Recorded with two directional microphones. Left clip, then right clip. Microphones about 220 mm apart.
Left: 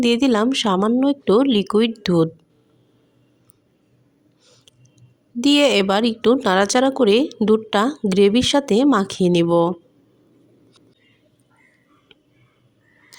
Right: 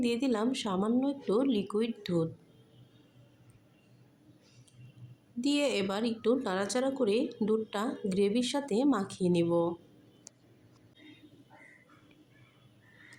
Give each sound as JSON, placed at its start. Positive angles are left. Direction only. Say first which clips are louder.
{"t": 0.0, "sound": "speech", "louder": "left 13 dB", "side_deg": 40}
{"t": 5.4, "sound": "speech", "louder": "left 15 dB", "side_deg": 40}